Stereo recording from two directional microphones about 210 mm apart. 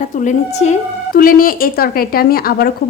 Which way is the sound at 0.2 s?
35° left (ahead or behind).